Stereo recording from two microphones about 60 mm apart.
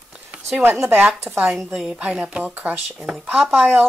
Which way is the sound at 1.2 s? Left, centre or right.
Right.